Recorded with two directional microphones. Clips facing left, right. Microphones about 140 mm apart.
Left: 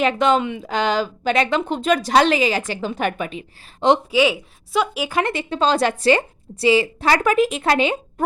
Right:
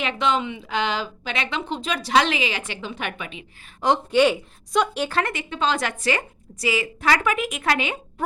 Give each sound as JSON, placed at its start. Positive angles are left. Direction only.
{"t": 0.0, "sound": "a woman's voice", "side_deg": 45}
{"t": 3.8, "sound": "a woman's voice", "side_deg": 20}
{"t": 4.1, "sound": "speech", "side_deg": 5}
{"t": 5.2, "sound": "a woman's voice", "side_deg": 30}